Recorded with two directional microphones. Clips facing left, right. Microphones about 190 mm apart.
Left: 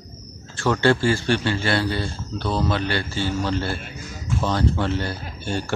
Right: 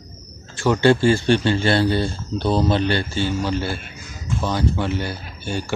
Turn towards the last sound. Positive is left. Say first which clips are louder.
# even
turn(degrees=-5)  # may be behind; listen again after turning